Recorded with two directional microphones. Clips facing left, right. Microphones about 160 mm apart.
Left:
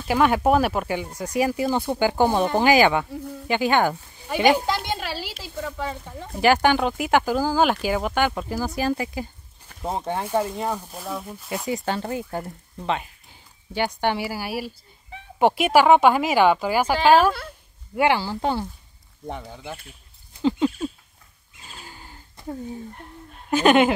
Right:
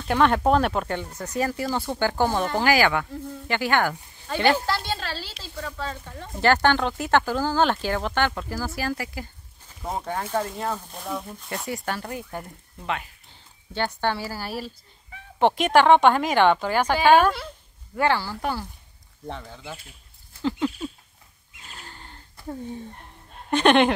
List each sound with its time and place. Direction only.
0.0 s speech: 5° left (ahead or behind)
11.0 s speech: 5° left (ahead or behind)
11.7 s speech: 20° left (ahead or behind)
13.3 s speech: 15° left (ahead or behind)
20.4 s rodents: 20° left (ahead or behind)
21.6 s a sound: 10° left (ahead or behind)
23.5 s speech: 5° left (ahead or behind)